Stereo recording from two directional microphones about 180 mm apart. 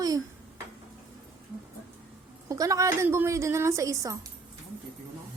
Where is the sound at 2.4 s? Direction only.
20° right (ahead or behind).